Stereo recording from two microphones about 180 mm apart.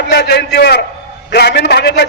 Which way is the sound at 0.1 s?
70° left (ahead or behind).